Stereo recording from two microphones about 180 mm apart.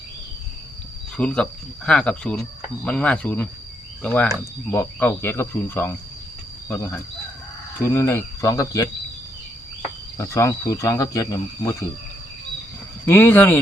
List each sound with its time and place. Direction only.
1.1 s speech: 5° left (ahead or behind)
10.2 s speech: 15° left (ahead or behind)
13.1 s speech: 10° left (ahead or behind)